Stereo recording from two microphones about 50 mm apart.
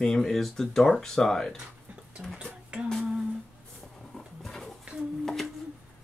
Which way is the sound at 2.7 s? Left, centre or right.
Right.